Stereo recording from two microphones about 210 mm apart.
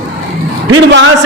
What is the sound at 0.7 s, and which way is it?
Speech, 60° right (ahead or behind).